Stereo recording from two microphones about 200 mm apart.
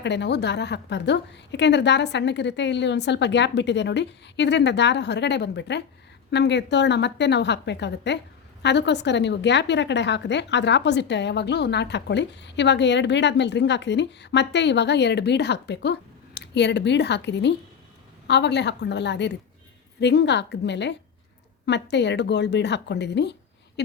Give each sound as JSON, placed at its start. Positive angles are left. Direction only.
{"t": 0.0, "sound": "a woman's voice", "side_deg": 60}